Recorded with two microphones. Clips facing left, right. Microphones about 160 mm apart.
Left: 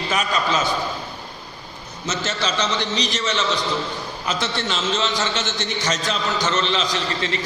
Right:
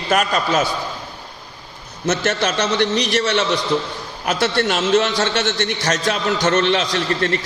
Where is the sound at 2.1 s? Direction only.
60° right (ahead or behind).